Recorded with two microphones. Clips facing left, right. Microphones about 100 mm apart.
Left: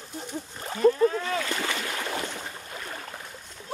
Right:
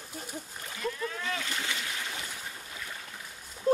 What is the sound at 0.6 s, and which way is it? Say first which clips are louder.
Splash: left 15 dB; 40° left (ahead or behind).